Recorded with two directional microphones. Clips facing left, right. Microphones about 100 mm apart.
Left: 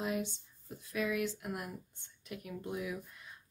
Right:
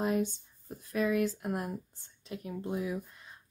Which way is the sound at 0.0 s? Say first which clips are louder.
Right 6 dB; 40° right (ahead or behind).